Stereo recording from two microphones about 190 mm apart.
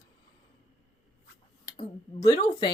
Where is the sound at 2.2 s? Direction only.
20° left (ahead or behind).